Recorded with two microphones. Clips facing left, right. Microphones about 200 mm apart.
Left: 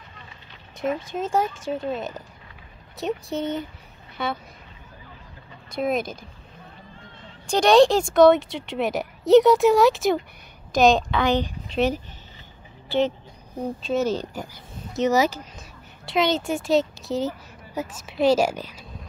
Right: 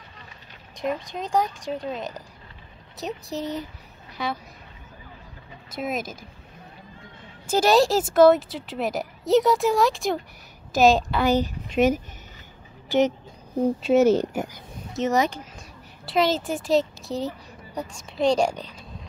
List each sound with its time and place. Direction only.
0.7 s speech: 5° left (ahead or behind)
5.7 s speech: centre (ahead or behind)
7.4 s a woman's voice: 5° right (ahead or behind)
14.1 s speech: 20° right (ahead or behind)
15.0 s speech: 5° left (ahead or behind)